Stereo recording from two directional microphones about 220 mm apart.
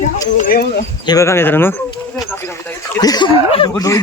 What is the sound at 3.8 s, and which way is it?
Speech, 15° left (ahead or behind).